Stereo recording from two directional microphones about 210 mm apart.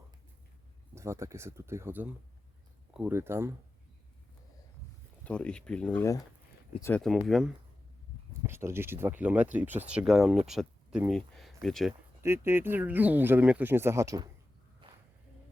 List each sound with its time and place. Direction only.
0.9 s speech: 15° right (ahead or behind)
5.2 s speech: 5° left (ahead or behind)
8.3 s speech: 10° right (ahead or behind)
12.2 s speech: 10° right (ahead or behind)
14.8 s a sound: 25° right (ahead or behind)